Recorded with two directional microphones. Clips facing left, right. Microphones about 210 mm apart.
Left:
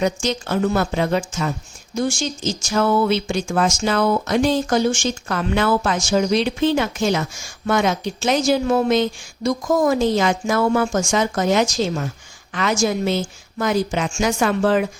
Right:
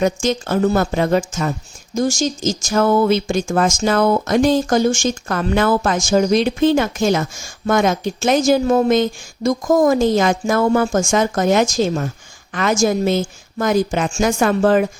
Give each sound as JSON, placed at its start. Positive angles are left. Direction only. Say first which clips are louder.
{"t": 0.0, "sound": "speech", "louder": "right 3 dB", "side_deg": -50}